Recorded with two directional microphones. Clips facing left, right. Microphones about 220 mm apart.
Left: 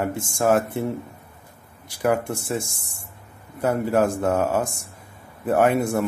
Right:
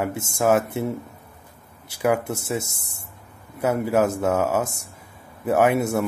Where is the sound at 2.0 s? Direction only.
10° right (ahead or behind).